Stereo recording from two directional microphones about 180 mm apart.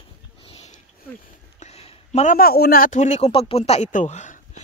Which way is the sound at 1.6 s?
35° left (ahead or behind).